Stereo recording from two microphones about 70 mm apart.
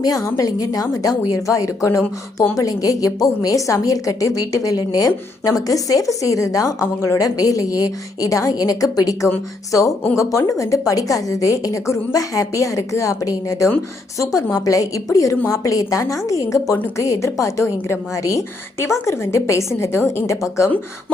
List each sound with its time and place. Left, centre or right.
0.0 s a woman's voice: left
10.2 s a woman's voice: left